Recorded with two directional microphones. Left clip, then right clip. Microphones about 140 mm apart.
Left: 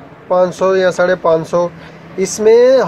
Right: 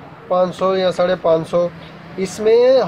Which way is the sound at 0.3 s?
35° left (ahead or behind).